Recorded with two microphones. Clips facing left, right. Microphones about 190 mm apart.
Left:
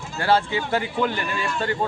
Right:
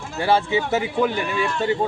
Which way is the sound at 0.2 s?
15° right (ahead or behind).